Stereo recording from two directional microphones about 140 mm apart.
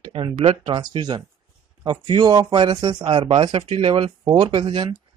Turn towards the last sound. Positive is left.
turn(degrees=-35)  # may be behind; listen again after turning